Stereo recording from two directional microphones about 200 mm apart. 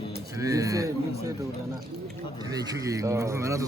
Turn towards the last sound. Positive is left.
turn(degrees=-15)  # may be behind; listen again after turning